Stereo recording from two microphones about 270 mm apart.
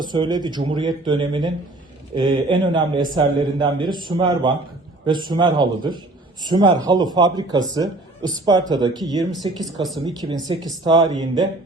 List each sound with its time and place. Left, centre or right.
0.0 s a man's voice: centre